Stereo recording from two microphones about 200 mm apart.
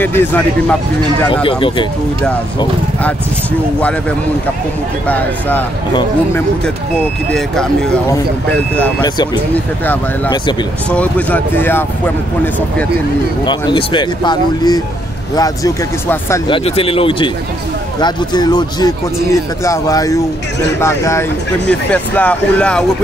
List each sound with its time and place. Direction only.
0.0 s speech: 10° left (ahead or behind)
1.3 s speech: 25° left (ahead or behind)
5.0 s speech: 10° left (ahead or behind)
7.2 s speech: centre (ahead or behind)
9.0 s speech: 20° left (ahead or behind)
10.9 s speech: 5° left (ahead or behind)
13.5 s speech: 25° left (ahead or behind)
16.4 s speech: 25° left (ahead or behind); by 22.8 s 5° left (ahead or behind)